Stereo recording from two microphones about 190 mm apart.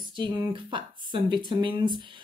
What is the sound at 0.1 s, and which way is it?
Speech, 25° right (ahead or behind).